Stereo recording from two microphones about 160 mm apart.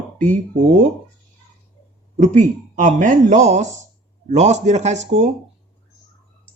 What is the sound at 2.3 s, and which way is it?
Speech, 50° right (ahead or behind).